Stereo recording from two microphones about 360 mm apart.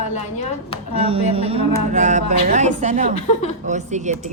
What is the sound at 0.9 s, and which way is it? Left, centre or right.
Speech, centre.